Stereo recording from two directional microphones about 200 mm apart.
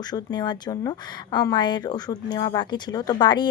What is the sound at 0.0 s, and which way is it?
Speech, 20° left (ahead or behind).